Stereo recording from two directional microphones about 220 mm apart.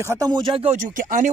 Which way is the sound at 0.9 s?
35° right (ahead or behind).